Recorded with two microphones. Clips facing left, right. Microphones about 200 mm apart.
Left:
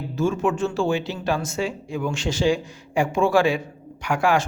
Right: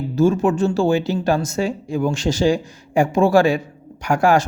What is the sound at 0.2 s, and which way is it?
Speech, 40° right (ahead or behind).